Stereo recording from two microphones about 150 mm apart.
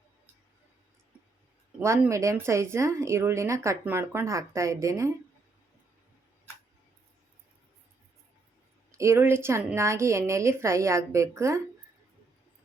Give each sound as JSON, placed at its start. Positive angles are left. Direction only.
{"t": 2.0, "sound": "speech", "side_deg": -20}
{"t": 9.0, "sound": "speech", "side_deg": -15}